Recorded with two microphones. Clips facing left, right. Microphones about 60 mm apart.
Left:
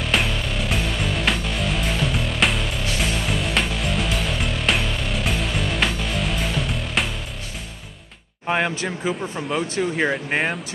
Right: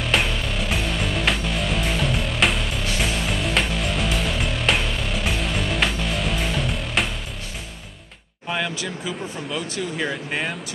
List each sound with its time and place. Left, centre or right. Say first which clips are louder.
0.0 s music: even; centre
8.5 s speech: left 4 dB; left